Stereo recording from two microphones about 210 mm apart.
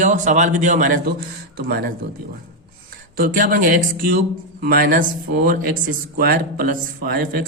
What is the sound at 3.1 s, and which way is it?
A man's voice, 40° right (ahead or behind).